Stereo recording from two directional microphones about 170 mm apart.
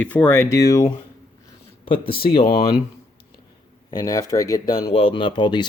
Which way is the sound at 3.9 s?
20° left (ahead or behind).